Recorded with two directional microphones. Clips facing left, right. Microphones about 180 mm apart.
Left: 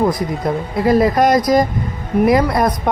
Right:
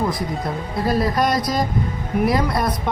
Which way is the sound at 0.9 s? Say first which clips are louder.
Left 7 dB; 90° left.